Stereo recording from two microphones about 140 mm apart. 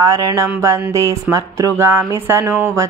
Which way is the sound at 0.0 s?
25° right (ahead or behind).